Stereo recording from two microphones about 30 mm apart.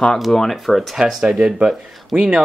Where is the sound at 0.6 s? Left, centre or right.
Centre.